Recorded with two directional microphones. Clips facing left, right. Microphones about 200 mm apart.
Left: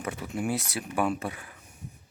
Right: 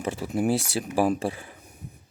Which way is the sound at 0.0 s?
30° right (ahead or behind).